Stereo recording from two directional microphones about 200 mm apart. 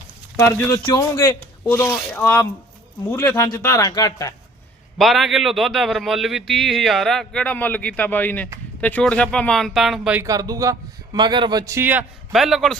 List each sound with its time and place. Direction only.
0.4 s speech: 10° left (ahead or behind)
4.9 s a man's voice: centre (ahead or behind)
10.2 s a man's voice: 20° right (ahead or behind); by 12.7 s centre (ahead or behind)